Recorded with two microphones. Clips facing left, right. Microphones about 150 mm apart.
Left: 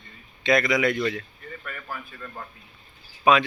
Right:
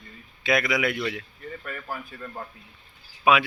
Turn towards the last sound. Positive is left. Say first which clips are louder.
# left 1 dB
turn(degrees=-5)  # may be behind; listen again after turning